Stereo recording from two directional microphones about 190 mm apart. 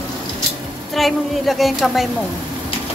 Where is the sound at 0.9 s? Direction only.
Centre (ahead or behind).